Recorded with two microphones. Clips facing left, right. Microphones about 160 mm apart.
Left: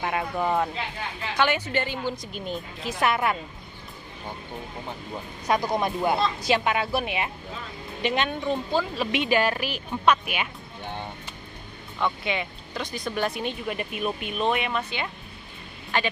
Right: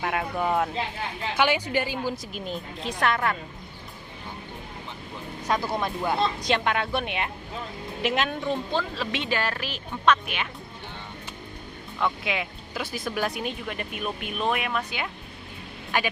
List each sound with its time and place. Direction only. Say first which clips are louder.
0.0 s speech: even; centre (ahead or behind)
5.5 s speech: left 3 dB; 15° left (ahead or behind)
11.9 s speech: even; centre (ahead or behind)